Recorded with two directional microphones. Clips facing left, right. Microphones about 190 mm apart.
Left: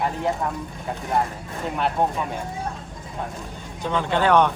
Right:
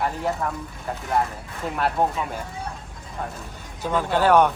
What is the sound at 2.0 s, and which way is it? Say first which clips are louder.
Speech: even; 5° right (ahead or behind).